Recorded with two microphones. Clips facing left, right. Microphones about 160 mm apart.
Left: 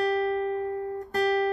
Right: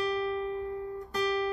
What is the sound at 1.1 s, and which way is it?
Music, 45° left (ahead or behind).